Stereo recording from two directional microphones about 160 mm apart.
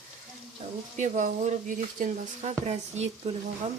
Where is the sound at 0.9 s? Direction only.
50° right (ahead or behind).